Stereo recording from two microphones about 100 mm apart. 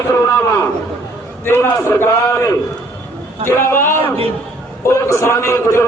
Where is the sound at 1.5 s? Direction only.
20° left (ahead or behind).